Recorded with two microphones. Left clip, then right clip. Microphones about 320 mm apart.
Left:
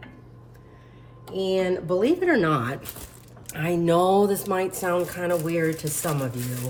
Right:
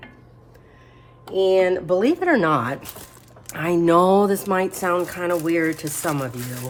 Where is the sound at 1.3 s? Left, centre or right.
Right.